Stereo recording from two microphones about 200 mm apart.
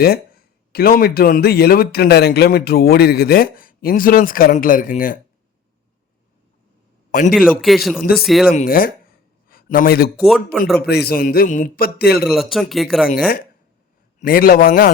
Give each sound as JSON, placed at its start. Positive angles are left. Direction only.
{"t": 0.7, "sound": "speech", "side_deg": 50}
{"t": 7.1, "sound": "a man's voice", "side_deg": 45}
{"t": 7.3, "sound": "speech", "side_deg": 0}
{"t": 8.4, "sound": "speech", "side_deg": 45}
{"t": 10.2, "sound": "speech", "side_deg": 0}
{"t": 10.8, "sound": "speech", "side_deg": 50}
{"t": 12.3, "sound": "speech", "side_deg": 0}
{"t": 13.1, "sound": "speech", "side_deg": 45}